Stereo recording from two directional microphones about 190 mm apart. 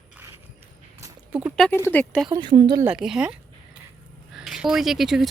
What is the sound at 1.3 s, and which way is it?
Speech, 5° right (ahead or behind).